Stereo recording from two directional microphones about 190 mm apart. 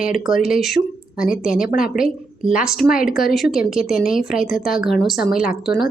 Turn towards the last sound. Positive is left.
turn(degrees=0)  # may be behind; listen again after turning